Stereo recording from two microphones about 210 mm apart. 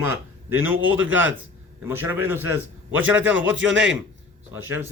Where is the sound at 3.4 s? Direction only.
65° right (ahead or behind).